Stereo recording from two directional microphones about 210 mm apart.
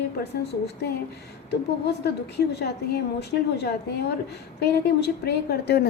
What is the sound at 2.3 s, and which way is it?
A woman's voice, 50° left (ahead or behind).